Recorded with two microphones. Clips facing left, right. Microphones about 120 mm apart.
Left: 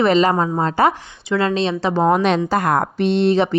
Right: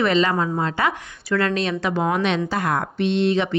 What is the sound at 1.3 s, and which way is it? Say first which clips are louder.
A woman's voice: left 3 dB; 25° left (ahead or behind).